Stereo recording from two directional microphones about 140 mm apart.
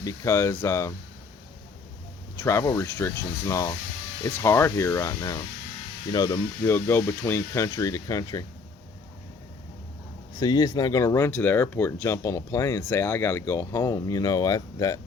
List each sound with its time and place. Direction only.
0.0 s speech: 20° left (ahead or behind)
2.4 s speech: 20° left (ahead or behind)
6.7 s speech: 15° left (ahead or behind)
10.4 s speech: 30° left (ahead or behind)